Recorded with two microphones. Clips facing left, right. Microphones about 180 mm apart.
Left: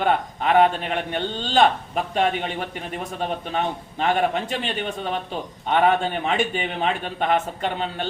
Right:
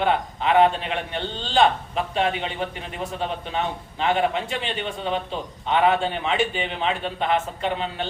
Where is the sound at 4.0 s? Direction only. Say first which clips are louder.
Left 1 dB; 45° left (ahead or behind).